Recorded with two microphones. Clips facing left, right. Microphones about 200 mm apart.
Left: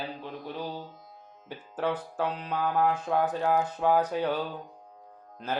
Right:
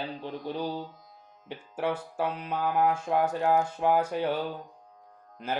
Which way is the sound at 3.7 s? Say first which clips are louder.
Left 1 dB; 10° right (ahead or behind).